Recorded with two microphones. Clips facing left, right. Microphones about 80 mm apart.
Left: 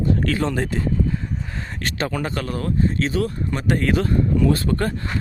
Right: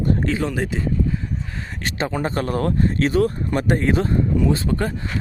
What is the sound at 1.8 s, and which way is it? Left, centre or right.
Speech, right.